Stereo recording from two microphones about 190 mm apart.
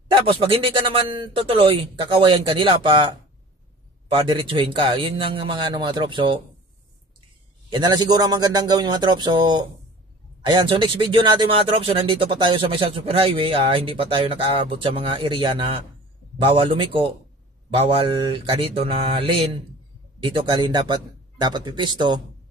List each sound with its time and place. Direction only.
0.3 s a man's voice: 30° right (ahead or behind)
7.7 s a man's voice: 20° right (ahead or behind)